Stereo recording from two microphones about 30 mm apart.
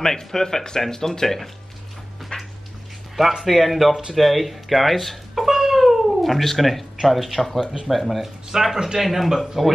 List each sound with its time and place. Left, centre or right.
0.0 s speech: centre
2.3 s cat: left
3.4 s speech: centre
5.3 s cat: centre
7.1 s speech: centre
8.5 s speech: centre
9.0 s speech: centre